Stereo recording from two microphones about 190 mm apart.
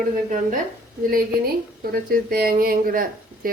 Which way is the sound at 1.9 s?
50° right (ahead or behind).